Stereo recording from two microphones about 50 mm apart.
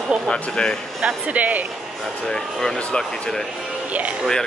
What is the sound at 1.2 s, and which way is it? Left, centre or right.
Speech, right.